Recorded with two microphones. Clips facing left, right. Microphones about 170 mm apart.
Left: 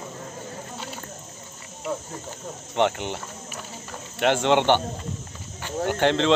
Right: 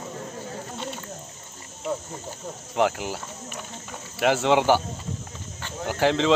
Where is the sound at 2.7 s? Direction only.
Centre (ahead or behind).